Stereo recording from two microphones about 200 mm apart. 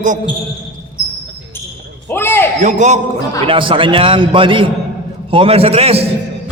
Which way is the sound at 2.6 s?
35° right (ahead or behind).